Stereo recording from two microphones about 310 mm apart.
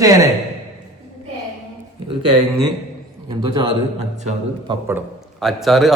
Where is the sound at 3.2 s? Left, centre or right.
Centre.